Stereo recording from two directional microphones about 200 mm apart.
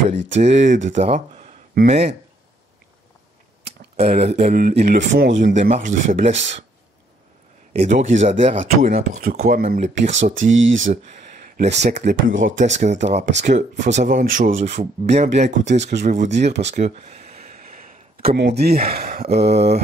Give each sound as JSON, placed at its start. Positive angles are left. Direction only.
{"t": 0.4, "sound": "speech", "side_deg": -35}
{"t": 3.9, "sound": "speech", "side_deg": -30}
{"t": 5.1, "sound": "speech", "side_deg": -70}
{"t": 5.4, "sound": "speech", "side_deg": -35}
{"t": 7.8, "sound": "speech", "side_deg": -35}
{"t": 10.4, "sound": "speech", "side_deg": -70}
{"t": 10.9, "sound": "a sound", "side_deg": -35}
{"t": 11.8, "sound": "speech", "side_deg": -35}
{"t": 16.6, "sound": "a sound", "side_deg": -35}
{"t": 18.9, "sound": "speech", "side_deg": -50}